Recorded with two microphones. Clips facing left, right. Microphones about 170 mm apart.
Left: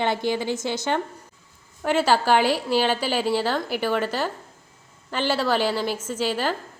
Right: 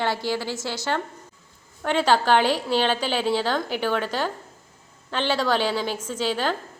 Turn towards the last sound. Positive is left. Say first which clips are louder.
# even
turn(degrees=10)  # may be behind; listen again after turning